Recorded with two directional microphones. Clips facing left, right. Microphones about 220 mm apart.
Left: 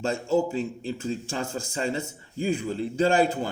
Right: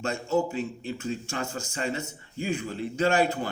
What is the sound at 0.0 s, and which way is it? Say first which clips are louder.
A man's voice: left 2 dB; 30° left (ahead or behind).